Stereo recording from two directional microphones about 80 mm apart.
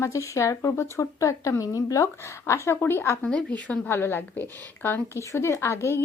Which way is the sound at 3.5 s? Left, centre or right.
Left.